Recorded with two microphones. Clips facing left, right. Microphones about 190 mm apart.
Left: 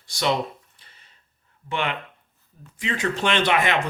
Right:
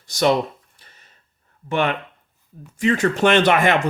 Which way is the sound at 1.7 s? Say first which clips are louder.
Right 6 dB; 45° right (ahead or behind).